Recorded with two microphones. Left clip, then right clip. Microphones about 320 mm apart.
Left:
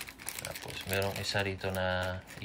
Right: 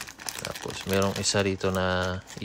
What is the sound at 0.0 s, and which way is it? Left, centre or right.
Speech, centre.